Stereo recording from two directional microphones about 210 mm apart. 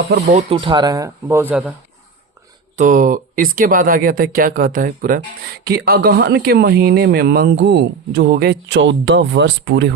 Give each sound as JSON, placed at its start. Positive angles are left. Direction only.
{"t": 0.3, "sound": "speech", "side_deg": -25}
{"t": 2.7, "sound": "speech", "side_deg": -40}